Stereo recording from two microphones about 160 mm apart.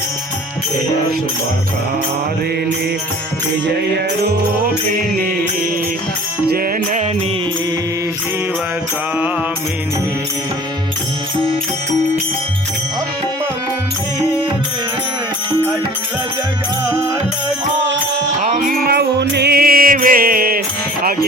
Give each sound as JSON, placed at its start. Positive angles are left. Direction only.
{"t": 3.9, "sound": "music", "side_deg": -90}
{"t": 18.4, "sound": "music", "side_deg": -50}